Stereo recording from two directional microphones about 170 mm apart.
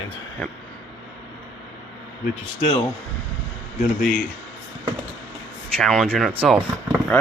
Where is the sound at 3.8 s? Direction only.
55° left (ahead or behind).